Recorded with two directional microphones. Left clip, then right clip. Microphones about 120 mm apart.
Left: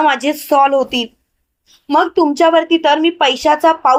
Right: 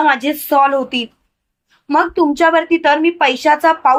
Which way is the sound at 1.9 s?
45° left (ahead or behind).